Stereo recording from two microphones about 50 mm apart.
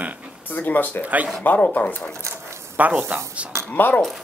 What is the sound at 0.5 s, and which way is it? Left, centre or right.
Speech, left.